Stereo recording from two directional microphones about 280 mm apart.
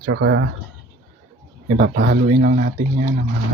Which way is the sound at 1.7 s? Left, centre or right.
Right.